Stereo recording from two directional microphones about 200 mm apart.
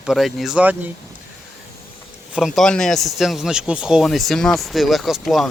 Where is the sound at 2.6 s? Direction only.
5° left (ahead or behind).